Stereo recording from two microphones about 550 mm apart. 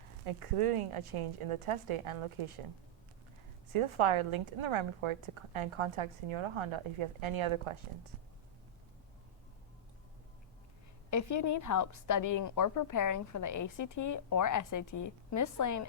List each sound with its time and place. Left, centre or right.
0.3 s a woman's voice: right
3.7 s a woman's voice: right
11.1 s a woman's voice: left